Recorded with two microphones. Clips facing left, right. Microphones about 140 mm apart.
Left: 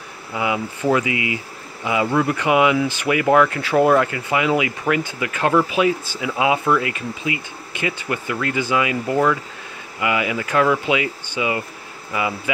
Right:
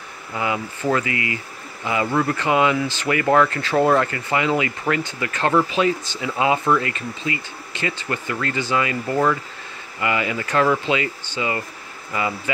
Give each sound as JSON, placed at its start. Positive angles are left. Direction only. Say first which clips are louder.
{"t": 0.3, "sound": "speech", "louder": "left 2 dB", "side_deg": 10}